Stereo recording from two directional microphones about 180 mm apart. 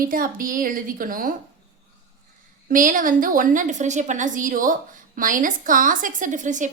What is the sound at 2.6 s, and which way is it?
A woman's voice, 45° right (ahead or behind).